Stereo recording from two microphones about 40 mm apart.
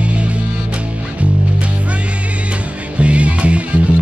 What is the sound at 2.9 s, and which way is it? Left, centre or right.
Music, right.